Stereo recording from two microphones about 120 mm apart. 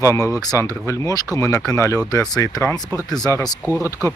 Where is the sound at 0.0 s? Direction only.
25° left (ahead or behind).